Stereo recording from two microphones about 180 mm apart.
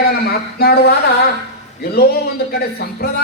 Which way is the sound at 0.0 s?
60° left (ahead or behind).